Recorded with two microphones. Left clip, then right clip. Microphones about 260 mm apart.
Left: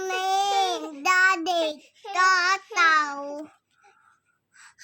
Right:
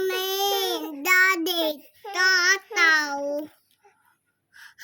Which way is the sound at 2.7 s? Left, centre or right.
Centre.